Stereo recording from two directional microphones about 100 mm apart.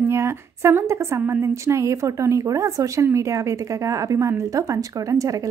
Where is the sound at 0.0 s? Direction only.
25° right (ahead or behind).